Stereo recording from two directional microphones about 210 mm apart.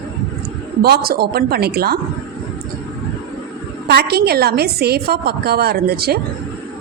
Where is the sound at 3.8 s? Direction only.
50° right (ahead or behind).